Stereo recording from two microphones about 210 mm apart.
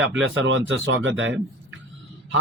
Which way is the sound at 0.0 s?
60° right (ahead or behind).